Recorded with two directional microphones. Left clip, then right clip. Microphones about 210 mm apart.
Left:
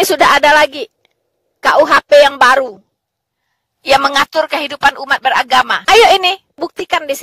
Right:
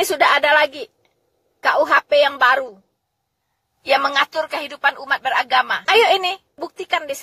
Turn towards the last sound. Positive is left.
turn(degrees=50)  # may be behind; listen again after turning